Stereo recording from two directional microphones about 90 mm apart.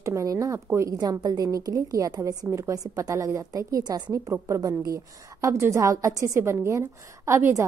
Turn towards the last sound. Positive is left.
turn(degrees=-35)  # may be behind; listen again after turning